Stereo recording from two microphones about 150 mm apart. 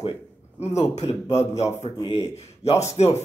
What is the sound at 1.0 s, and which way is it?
Speech, 45° left (ahead or behind).